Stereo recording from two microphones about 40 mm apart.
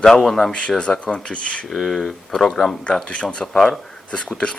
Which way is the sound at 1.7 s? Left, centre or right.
Centre.